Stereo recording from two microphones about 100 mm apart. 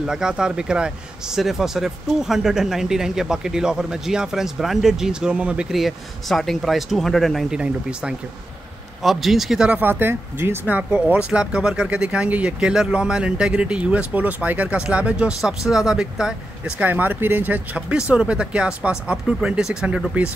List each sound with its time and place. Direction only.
0.0 s speech: 5° right (ahead or behind)
9.7 s speech: 20° right (ahead or behind)